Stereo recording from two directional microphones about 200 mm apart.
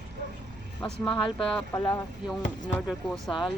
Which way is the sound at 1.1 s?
25° left (ahead or behind).